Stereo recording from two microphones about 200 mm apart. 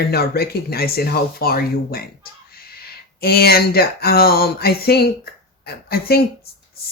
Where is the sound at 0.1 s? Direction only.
50° left (ahead or behind).